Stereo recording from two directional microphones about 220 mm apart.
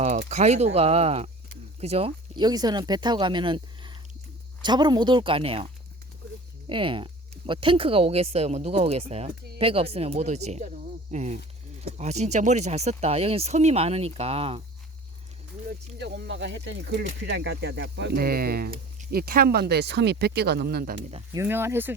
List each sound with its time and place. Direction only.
0.3 s speech: 30° right (ahead or behind)
6.7 s speech: 25° right (ahead or behind)
16.0 s speech: 50° right (ahead or behind)
21.3 s speech: 10° right (ahead or behind)